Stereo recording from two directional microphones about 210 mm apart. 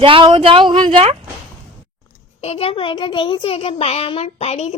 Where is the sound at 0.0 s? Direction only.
25° right (ahead or behind).